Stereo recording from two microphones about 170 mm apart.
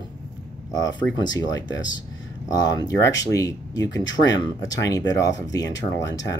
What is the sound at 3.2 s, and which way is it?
Speech, 20° left (ahead or behind).